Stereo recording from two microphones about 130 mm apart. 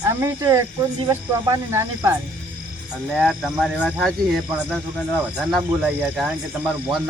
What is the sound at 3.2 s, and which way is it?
Speech, 5° right (ahead or behind).